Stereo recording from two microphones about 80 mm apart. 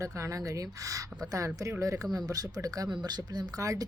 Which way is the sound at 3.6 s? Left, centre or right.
Right.